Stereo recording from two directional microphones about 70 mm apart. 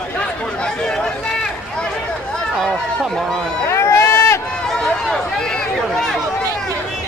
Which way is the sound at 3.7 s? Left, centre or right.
Left.